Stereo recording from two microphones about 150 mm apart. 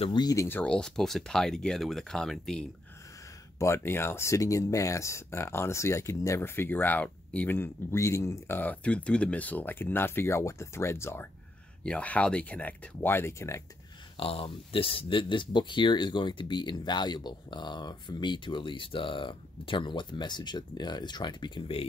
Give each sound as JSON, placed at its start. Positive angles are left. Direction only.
{"t": 0.0, "sound": "speech", "side_deg": 30}
{"t": 0.5, "sound": "speech", "side_deg": 10}
{"t": 3.5, "sound": "speech", "side_deg": 20}
{"t": 14.1, "sound": "speech", "side_deg": 40}